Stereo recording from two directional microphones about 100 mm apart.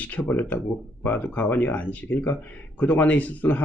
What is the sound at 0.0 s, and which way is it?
Speech, 15° left (ahead or behind).